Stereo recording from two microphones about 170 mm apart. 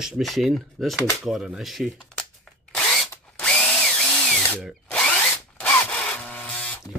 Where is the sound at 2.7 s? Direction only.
Centre (ahead or behind).